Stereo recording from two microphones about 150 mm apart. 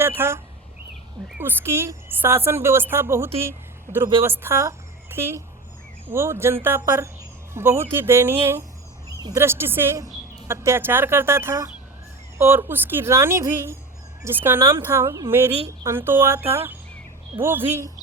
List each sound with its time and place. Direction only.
0.0 s speech: 15° right (ahead or behind)